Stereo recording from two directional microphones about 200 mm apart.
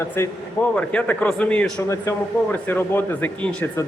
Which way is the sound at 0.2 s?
15° left (ahead or behind).